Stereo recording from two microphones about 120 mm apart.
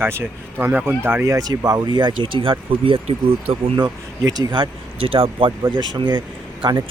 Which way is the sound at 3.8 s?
35° right (ahead or behind).